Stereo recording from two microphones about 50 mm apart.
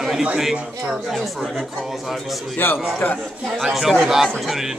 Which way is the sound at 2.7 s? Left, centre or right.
Centre.